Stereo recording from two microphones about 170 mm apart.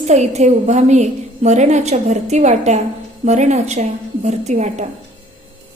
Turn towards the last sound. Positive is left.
turn(degrees=-45)  # may be behind; listen again after turning